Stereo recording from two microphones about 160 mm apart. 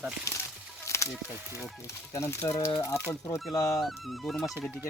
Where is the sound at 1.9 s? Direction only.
15° left (ahead or behind).